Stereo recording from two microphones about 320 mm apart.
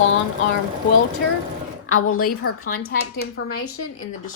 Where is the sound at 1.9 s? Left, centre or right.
Left.